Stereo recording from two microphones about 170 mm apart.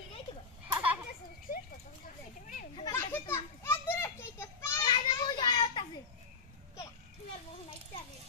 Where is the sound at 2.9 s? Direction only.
15° left (ahead or behind).